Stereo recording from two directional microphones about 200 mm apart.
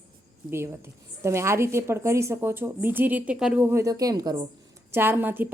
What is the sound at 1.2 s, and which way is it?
Speech, 15° right (ahead or behind).